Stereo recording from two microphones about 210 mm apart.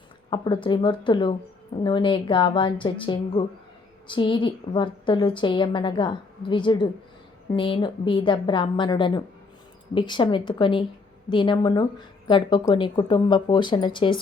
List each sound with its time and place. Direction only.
0.3 s speech: 25° left (ahead or behind)